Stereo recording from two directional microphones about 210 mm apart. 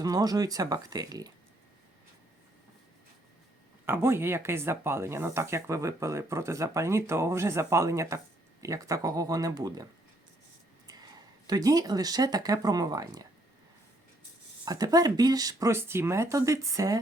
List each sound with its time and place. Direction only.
0.0 s speech: 15° right (ahead or behind)
3.8 s speech: 10° right (ahead or behind)
11.4 s speech: 15° right (ahead or behind)
14.6 s speech: 15° right (ahead or behind)